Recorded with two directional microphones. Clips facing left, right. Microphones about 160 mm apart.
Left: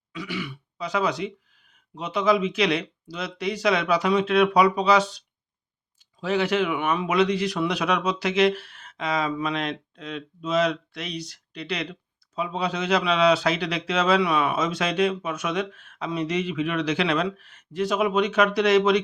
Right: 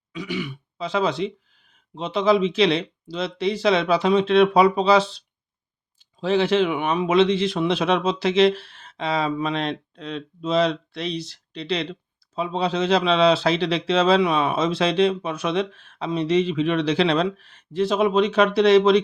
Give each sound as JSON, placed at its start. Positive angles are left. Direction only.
{"t": 0.1, "sound": "a man's voice", "side_deg": -20}